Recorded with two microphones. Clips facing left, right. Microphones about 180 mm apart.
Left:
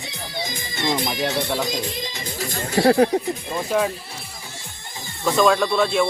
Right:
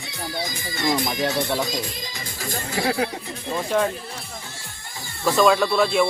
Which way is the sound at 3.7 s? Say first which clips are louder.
Even; 5° left (ahead or behind).